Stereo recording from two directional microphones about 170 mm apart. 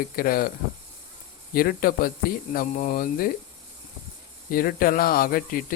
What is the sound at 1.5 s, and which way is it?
Speech, 60° left (ahead or behind).